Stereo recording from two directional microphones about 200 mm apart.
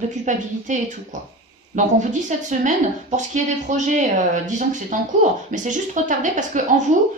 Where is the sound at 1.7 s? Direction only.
40° right (ahead or behind).